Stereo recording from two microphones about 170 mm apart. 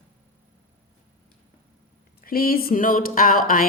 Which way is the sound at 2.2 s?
60° left (ahead or behind).